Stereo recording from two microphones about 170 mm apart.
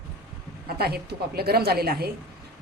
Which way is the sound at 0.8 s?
65° right (ahead or behind).